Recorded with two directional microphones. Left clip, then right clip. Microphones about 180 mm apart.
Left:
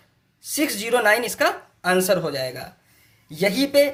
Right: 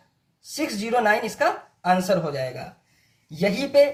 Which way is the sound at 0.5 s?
40° left (ahead or behind).